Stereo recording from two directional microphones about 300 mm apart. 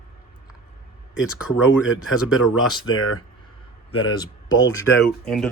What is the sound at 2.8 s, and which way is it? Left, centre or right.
Speech, left.